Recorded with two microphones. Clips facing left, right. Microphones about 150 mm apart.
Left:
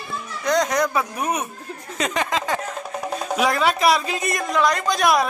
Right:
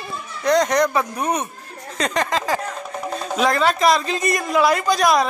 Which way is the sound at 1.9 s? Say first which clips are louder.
Right 2 dB; 5° left (ahead or behind).